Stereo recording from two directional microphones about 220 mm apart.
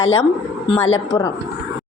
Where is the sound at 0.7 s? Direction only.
25° left (ahead or behind).